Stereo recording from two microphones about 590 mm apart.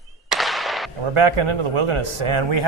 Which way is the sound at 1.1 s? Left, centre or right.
Right.